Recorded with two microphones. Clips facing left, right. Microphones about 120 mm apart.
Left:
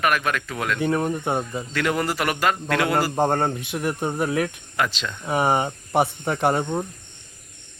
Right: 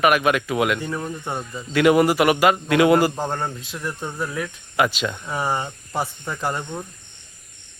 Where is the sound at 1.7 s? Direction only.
15° right (ahead or behind).